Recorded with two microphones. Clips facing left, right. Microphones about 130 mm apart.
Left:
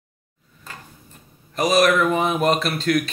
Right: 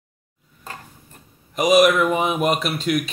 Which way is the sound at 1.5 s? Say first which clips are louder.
Right 2 dB; 15° right (ahead or behind).